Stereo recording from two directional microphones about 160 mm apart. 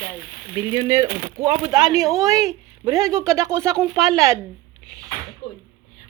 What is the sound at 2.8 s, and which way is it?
Speech, 20° right (ahead or behind).